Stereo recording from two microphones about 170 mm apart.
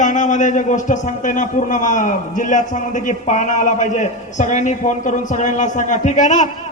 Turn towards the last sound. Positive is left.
turn(degrees=45)  # may be behind; listen again after turning